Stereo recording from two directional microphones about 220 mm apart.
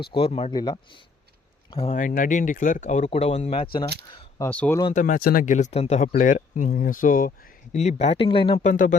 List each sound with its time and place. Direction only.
0.1 s speech: 25° left (ahead or behind)
4.1 s a sound: 20° left (ahead or behind)
4.4 s speech: 5° left (ahead or behind)
4.9 s speech: 35° left (ahead or behind)